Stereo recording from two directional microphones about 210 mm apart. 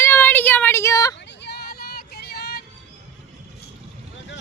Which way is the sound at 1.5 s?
50° left (ahead or behind).